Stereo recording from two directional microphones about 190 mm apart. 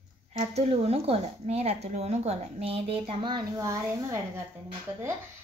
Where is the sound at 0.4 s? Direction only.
35° right (ahead or behind); by 4.2 s 15° right (ahead or behind).